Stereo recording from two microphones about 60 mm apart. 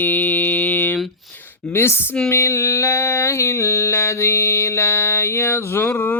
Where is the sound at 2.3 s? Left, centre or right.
Left.